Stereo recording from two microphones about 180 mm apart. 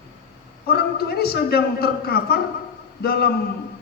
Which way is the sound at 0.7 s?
60° left (ahead or behind).